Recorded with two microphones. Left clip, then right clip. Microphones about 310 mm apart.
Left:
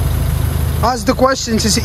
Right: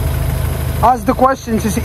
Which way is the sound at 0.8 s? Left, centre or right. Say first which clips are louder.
Right 2 dB; centre.